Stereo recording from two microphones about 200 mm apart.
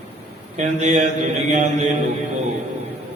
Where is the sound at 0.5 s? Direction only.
35° right (ahead or behind).